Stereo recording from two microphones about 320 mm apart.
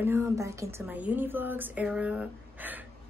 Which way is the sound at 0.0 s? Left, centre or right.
Centre.